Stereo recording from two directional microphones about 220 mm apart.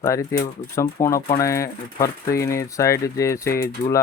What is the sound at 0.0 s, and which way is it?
Speech, 15° left (ahead or behind).